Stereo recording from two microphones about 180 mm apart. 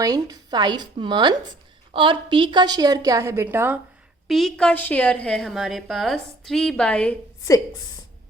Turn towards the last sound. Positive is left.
turn(degrees=20)  # may be behind; listen again after turning